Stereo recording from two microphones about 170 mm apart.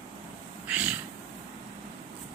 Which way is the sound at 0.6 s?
5° right (ahead or behind).